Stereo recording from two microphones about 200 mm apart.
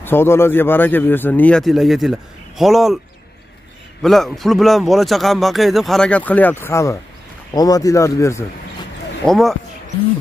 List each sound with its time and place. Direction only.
0.0 s speech: 10° left (ahead or behind)
4.0 s a man's voice: centre (ahead or behind)
9.2 s a man's voice: centre (ahead or behind)